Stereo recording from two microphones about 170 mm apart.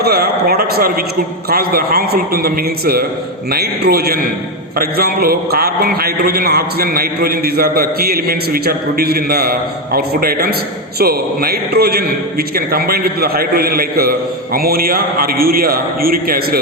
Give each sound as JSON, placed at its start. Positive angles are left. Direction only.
{"t": 0.0, "sound": "a man's voice", "side_deg": -65}